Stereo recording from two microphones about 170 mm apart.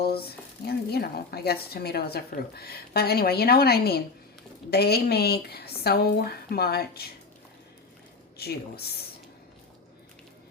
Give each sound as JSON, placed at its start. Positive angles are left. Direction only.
{"t": 0.0, "sound": "speech", "side_deg": 65}
{"t": 8.4, "sound": "speech", "side_deg": 65}